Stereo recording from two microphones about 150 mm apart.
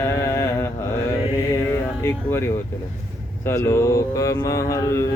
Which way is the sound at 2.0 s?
15° left (ahead or behind).